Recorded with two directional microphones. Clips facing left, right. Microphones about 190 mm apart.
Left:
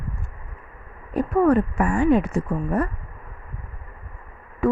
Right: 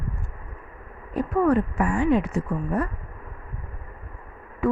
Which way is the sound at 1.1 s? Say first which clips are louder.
Left 3 dB; 50° left (ahead or behind).